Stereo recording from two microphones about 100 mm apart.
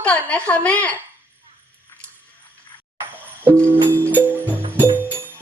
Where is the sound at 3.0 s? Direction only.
25° right (ahead or behind).